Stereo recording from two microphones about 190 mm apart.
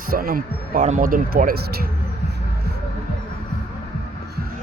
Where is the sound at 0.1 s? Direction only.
50° right (ahead or behind).